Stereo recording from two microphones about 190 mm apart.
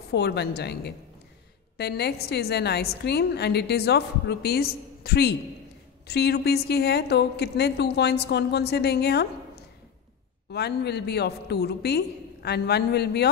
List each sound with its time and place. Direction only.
0.1 s a woman's voice: 60° left (ahead or behind)
10.5 s a woman's voice: 60° left (ahead or behind)